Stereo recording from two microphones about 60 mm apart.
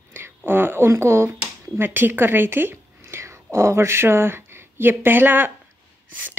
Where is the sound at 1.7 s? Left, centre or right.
Right.